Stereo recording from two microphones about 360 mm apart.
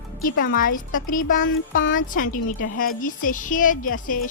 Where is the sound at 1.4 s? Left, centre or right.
Left.